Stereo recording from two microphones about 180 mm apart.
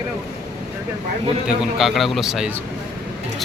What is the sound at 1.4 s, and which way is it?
Speech, centre (ahead or behind).